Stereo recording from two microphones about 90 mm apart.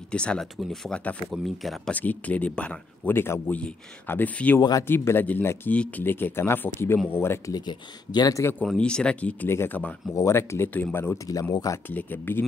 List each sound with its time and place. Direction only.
0.1 s speech: 10° left (ahead or behind)
0.6 s speech: centre (ahead or behind)
1.9 s speech: 15° left (ahead or behind)
3.1 s speech: 25° left (ahead or behind)
4.6 s speech: 45° left (ahead or behind)
4.8 s speech: 25° left (ahead or behind)
7.5 s speech: 50° left (ahead or behind)
8.6 s speech: 10° left (ahead or behind)
10.1 s speech: 30° left (ahead or behind)
11.5 s speech: 40° left (ahead or behind)
11.9 s speech: 20° left (ahead or behind)